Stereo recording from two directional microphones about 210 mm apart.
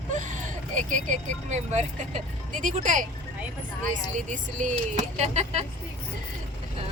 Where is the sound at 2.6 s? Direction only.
35° right (ahead or behind).